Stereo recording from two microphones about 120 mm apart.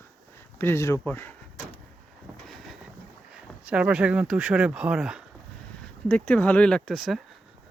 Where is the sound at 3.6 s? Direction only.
10° right (ahead or behind).